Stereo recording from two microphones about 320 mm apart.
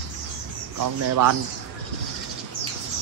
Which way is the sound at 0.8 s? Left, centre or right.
Right.